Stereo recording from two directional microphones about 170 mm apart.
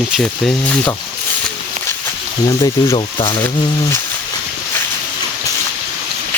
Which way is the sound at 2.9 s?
30° left (ahead or behind).